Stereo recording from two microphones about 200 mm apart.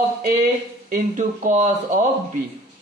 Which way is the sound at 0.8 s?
40° right (ahead or behind).